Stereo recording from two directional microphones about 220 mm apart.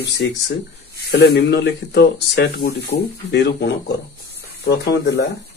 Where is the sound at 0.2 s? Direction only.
55° left (ahead or behind).